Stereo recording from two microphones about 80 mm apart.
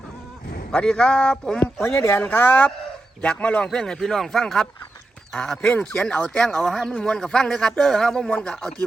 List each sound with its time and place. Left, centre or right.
0.7 s speech: centre
1.6 s speech: left; by 6.3 s centre
6.3 s speech: centre